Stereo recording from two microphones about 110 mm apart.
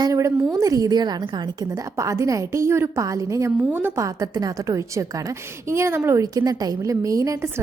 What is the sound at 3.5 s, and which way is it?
Speech, 5° right (ahead or behind).